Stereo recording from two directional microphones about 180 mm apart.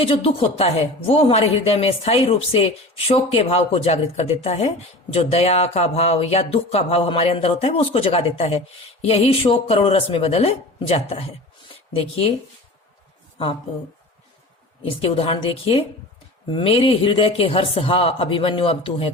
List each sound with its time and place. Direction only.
0.0 s speech: 30° left (ahead or behind)
14.8 s speech: 30° left (ahead or behind)